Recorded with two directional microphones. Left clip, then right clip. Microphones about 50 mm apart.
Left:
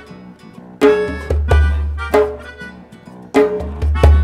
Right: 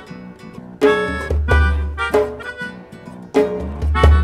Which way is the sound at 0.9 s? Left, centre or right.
Right.